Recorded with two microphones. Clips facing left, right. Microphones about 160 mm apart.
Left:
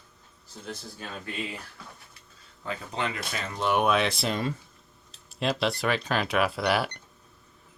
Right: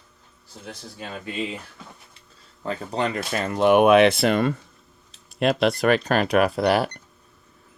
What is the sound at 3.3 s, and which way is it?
Speech, 60° right (ahead or behind).